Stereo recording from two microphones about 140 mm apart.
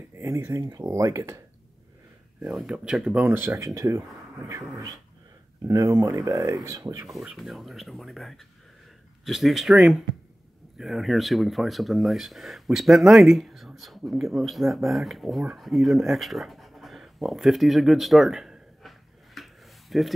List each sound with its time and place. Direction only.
0.1 s speech: 20° right (ahead or behind)
2.4 s speech: 5° right (ahead or behind)
3.3 s speech: 15° right (ahead or behind)
7.1 s speech: centre (ahead or behind)